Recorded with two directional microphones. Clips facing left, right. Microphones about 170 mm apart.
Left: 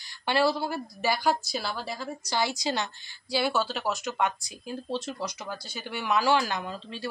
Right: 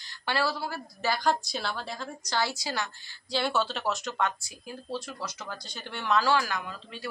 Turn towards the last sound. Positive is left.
turn(degrees=25)  # may be behind; listen again after turning